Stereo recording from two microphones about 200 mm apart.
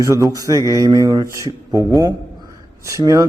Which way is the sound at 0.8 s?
15° right (ahead or behind).